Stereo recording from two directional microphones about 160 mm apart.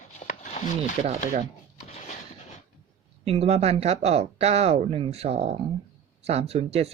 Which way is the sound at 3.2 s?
40° right (ahead or behind).